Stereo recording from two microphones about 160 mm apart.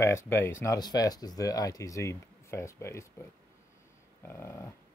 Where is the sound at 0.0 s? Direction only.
15° left (ahead or behind).